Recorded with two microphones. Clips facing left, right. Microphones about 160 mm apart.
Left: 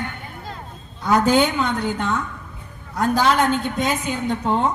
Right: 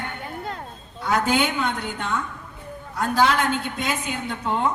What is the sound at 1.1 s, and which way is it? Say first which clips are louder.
Speech: left 5 dB; 45° left (ahead or behind).